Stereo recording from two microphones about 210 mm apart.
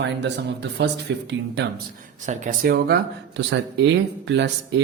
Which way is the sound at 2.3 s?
35° right (ahead or behind).